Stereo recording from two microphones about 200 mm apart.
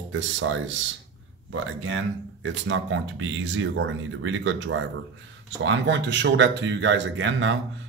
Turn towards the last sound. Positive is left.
turn(degrees=-65)  # may be behind; listen again after turning